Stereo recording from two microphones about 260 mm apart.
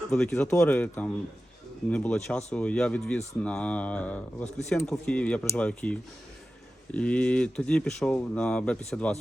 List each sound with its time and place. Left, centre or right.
0.1 s speech: centre